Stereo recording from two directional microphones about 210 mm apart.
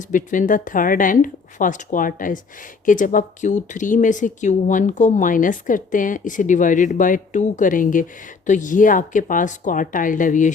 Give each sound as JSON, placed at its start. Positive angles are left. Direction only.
{"t": 0.1, "sound": "speech", "side_deg": 40}